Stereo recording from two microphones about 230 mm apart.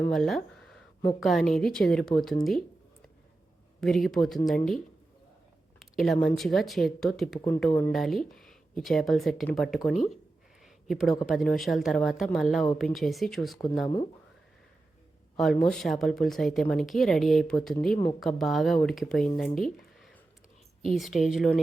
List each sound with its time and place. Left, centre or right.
0.1 s speech: centre
3.8 s speech: centre
5.8 s speech: centre
10.6 s a sound: centre
11.3 s speech: centre
13.8 s speech: left
15.4 s speech: centre